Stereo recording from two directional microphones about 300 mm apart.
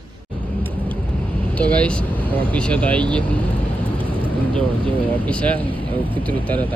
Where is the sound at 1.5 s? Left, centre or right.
Centre.